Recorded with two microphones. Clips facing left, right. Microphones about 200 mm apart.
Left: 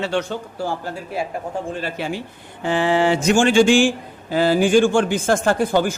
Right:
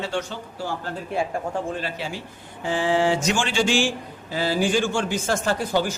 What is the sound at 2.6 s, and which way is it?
Speech, 65° left (ahead or behind).